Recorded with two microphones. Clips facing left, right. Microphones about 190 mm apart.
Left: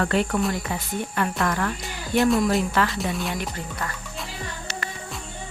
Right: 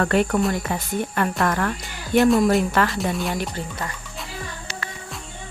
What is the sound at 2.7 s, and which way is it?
Speech, 45° right (ahead or behind).